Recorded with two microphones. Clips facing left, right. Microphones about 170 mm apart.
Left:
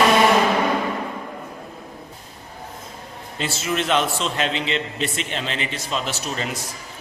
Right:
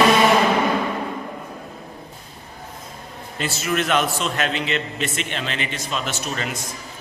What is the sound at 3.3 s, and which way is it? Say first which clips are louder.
A man's voice: right 1 dB; 25° left (ahead or behind).